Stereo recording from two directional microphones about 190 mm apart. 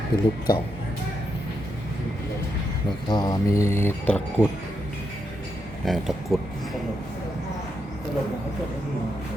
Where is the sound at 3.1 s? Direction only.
20° left (ahead or behind).